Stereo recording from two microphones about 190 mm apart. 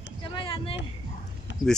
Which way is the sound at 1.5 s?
70° left (ahead or behind).